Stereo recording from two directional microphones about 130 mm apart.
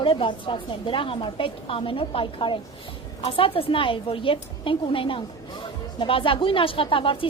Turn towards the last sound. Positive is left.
turn(degrees=40)  # may be behind; listen again after turning